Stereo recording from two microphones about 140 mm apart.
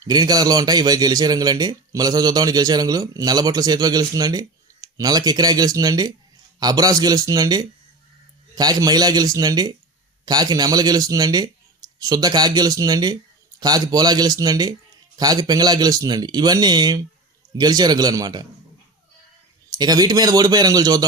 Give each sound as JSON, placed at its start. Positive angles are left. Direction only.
{"t": 0.0, "sound": "speech", "side_deg": -30}
{"t": 19.7, "sound": "speech", "side_deg": -30}